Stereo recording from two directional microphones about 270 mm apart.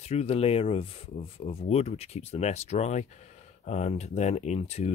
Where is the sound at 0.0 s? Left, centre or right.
Left.